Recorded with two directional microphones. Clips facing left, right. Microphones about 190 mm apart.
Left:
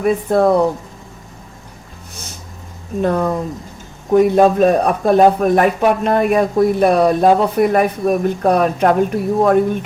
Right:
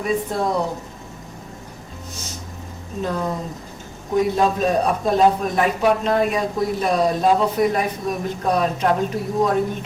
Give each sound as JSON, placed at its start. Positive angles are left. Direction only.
{"t": 0.0, "sound": "a man's voice", "side_deg": 60}
{"t": 3.0, "sound": "a man's voice", "side_deg": 55}